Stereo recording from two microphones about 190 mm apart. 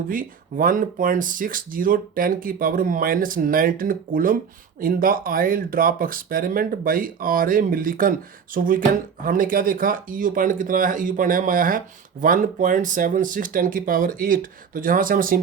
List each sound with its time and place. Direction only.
0.1 s speech: 45° right (ahead or behind)